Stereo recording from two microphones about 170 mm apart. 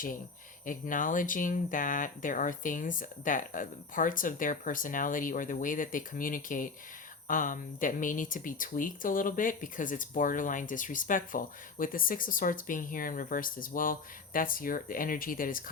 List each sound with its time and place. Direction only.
0.6 s speech: 50° left (ahead or behind)